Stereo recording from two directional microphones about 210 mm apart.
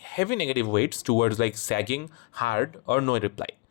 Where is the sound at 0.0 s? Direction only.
50° left (ahead or behind).